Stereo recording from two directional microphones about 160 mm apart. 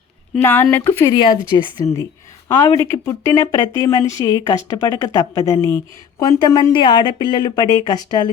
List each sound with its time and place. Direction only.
0.3 s speech: 10° left (ahead or behind)
1.1 s a woman's voice: 25° left (ahead or behind)